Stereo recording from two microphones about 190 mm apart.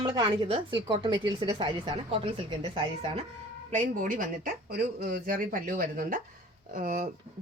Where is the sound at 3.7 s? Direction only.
45° right (ahead or behind).